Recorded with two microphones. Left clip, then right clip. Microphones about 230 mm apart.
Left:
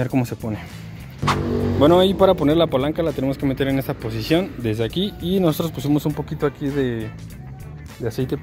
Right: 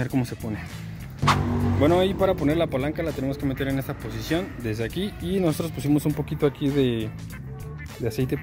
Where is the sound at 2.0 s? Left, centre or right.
Left; by 6.3 s centre.